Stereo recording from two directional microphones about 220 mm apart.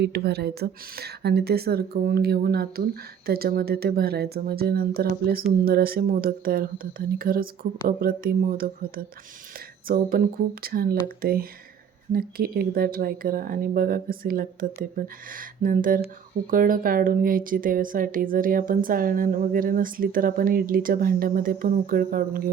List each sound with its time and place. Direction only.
0.0 s speech: 45° right (ahead or behind)